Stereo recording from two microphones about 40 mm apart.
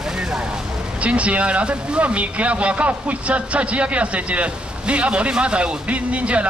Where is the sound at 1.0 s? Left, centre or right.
Right.